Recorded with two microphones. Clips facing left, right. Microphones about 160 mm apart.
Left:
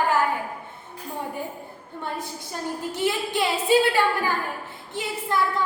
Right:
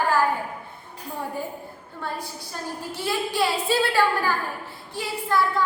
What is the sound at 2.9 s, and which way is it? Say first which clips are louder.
A woman's voice: left 1 dB; 20° left (ahead or behind).